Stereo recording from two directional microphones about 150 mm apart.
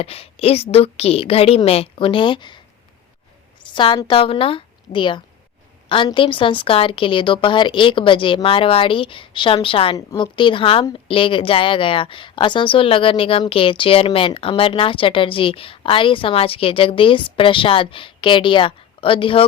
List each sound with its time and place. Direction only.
0.0 s a woman's voice: 40° left (ahead or behind)
3.6 s a woman's voice: 35° left (ahead or behind)